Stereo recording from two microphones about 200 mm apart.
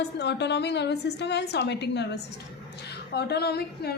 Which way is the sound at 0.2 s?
60° left (ahead or behind).